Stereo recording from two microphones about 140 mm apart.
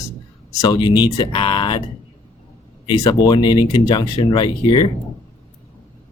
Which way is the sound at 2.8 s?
30° left (ahead or behind).